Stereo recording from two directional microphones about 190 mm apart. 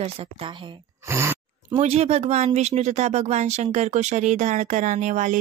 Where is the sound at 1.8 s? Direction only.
35° right (ahead or behind).